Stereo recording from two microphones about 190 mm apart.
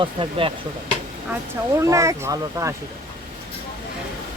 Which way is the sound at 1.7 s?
15° right (ahead or behind).